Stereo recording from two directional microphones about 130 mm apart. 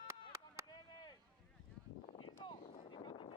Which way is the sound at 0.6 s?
35° left (ahead or behind).